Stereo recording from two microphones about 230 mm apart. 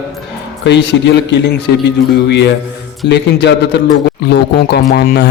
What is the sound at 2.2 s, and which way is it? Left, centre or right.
A man's voice, left.